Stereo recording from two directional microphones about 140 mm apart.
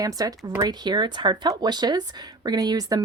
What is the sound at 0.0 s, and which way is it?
Speech, 25° right (ahead or behind).